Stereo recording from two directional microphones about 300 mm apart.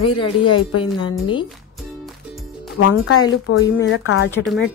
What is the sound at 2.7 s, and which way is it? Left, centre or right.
A woman's voice, left.